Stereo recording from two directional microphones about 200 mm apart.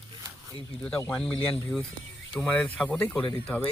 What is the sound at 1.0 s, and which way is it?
Speech, 5° left (ahead or behind).